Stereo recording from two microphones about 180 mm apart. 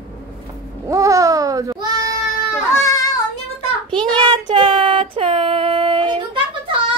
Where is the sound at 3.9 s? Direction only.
25° right (ahead or behind).